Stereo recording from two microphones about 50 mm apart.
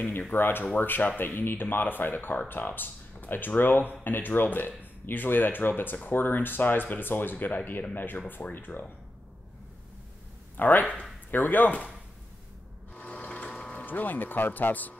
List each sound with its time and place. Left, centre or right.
0.3 s speech: left
10.6 s speech: left
12.9 s ratchet: left
13.7 s speech: left